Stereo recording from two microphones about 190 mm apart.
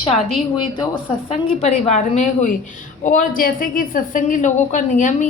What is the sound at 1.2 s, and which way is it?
A woman's voice, 35° left (ahead or behind).